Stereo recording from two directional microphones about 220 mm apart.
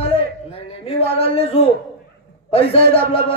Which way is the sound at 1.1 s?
25° left (ahead or behind).